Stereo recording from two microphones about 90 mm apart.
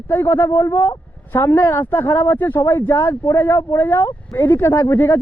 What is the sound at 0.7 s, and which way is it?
Speech, 55° left (ahead or behind).